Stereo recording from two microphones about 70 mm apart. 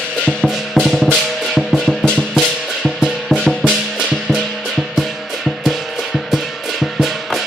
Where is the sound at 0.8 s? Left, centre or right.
Centre.